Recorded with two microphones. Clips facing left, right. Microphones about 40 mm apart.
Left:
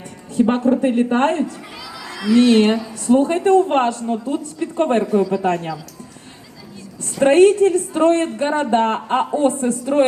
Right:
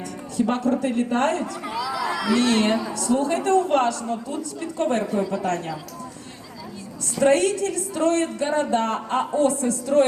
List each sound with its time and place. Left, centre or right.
0.3 s a woman's voice: left
1.6 s speech: centre
1.9 s a sound: centre
2.1 s a sound: centre
2.4 s a woman's voice: left
7.2 s a woman's voice: left